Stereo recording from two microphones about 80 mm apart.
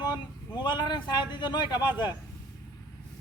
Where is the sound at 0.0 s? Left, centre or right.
Left.